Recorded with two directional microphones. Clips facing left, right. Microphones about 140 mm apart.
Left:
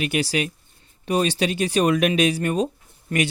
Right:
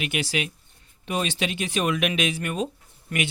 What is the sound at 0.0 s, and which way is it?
Speech, 35° left (ahead or behind).